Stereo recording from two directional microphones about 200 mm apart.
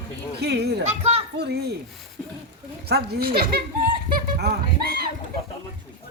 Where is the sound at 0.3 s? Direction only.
55° right (ahead or behind).